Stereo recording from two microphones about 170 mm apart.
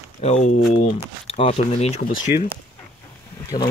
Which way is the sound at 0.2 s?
40° left (ahead or behind).